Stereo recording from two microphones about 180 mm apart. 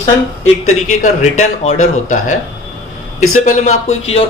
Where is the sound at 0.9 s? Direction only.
40° left (ahead or behind).